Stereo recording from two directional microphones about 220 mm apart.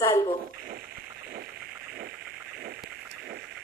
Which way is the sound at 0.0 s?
15° left (ahead or behind).